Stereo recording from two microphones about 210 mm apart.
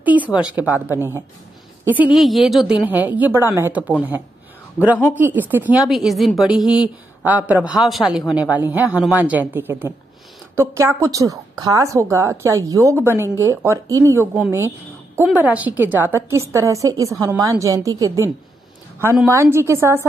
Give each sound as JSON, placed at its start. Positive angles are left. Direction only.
{"t": 0.0, "sound": "a sound", "side_deg": -5}
{"t": 0.6, "sound": "a woman's voice", "side_deg": -10}
{"t": 2.1, "sound": "a woman's voice", "side_deg": 0}
{"t": 6.6, "sound": "speech", "side_deg": 20}
{"t": 7.2, "sound": "a woman's voice", "side_deg": -10}